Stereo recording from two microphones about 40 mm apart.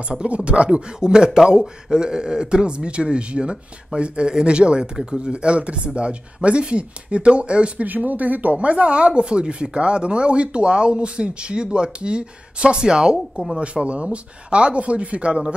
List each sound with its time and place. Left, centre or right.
0.5 s speech: right
7.8 s speech: right
8.5 s speech: right